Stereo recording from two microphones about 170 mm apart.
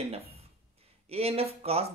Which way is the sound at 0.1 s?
35° right (ahead or behind).